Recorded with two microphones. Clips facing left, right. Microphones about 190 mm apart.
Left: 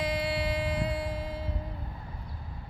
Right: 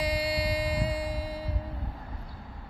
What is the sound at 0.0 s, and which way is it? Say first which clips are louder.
Music: right 1 dB; 35° right (ahead or behind).